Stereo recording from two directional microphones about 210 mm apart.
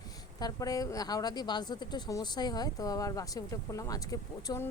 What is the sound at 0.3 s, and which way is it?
Speech, 20° left (ahead or behind).